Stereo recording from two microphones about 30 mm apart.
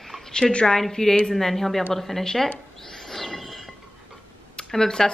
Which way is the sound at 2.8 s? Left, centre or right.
Centre.